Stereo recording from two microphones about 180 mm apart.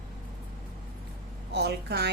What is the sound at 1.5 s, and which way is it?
Speech, 65° right (ahead or behind).